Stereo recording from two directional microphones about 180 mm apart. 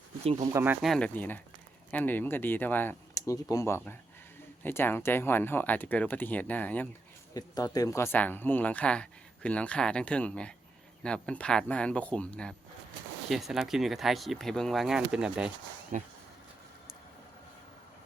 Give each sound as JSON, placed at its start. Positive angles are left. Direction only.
{"t": 0.5, "sound": "speech", "side_deg": -10}
{"t": 0.9, "sound": "speech", "side_deg": 5}
{"t": 7.3, "sound": "speech", "side_deg": 20}
{"t": 15.9, "sound": "speech", "side_deg": -45}